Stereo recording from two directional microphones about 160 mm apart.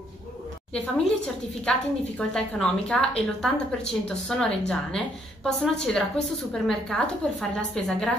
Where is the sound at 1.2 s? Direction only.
5° left (ahead or behind).